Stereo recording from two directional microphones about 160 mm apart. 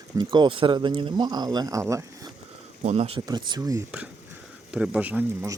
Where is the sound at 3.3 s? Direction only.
25° right (ahead or behind).